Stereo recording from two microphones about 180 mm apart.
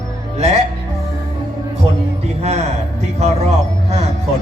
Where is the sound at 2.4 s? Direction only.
35° right (ahead or behind).